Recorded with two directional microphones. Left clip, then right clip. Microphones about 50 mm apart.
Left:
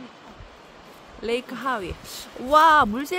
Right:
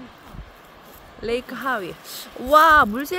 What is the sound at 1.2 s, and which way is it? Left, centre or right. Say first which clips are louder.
Speech: right 1 dB; centre.